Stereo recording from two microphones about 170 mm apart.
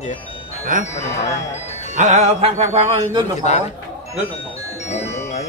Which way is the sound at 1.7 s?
40° left (ahead or behind).